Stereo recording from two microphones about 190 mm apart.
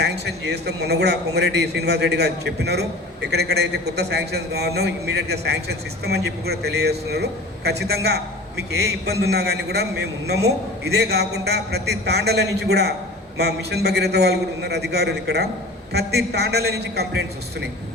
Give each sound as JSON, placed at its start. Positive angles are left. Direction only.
{"t": 0.0, "sound": "a man's voice", "side_deg": -60}